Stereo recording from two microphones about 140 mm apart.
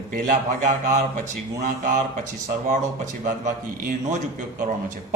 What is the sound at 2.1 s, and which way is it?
A man's voice, 65° right (ahead or behind).